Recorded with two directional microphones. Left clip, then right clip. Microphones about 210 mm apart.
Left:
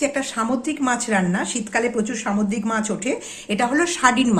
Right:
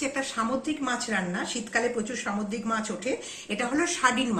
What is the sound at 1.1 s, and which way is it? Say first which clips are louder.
Speech: left 7 dB; 45° left (ahead or behind).